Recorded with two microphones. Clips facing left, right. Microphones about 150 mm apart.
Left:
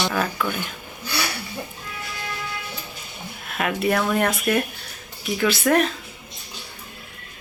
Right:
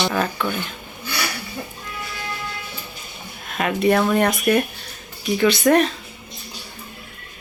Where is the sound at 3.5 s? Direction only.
Centre (ahead or behind).